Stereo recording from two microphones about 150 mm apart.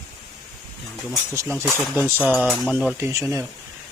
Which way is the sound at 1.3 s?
15° right (ahead or behind).